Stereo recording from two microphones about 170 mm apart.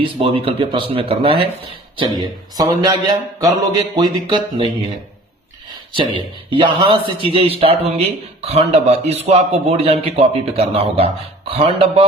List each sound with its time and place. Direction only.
0.0 s a man's voice: 30° right (ahead or behind)
2.1 s speech: 25° right (ahead or behind)
5.9 s a man's voice: 30° right (ahead or behind)